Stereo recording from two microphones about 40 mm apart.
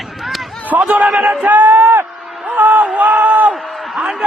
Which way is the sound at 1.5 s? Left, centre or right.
Right.